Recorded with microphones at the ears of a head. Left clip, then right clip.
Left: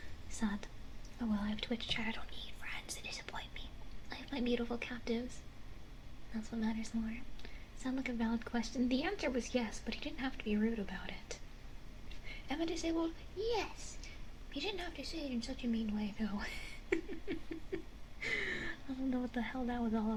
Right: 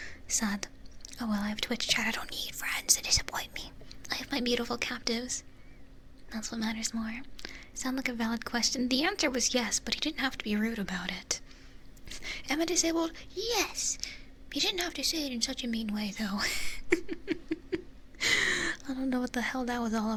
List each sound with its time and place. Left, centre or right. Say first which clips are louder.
0.0 s a woman's voice: right 10 dB; right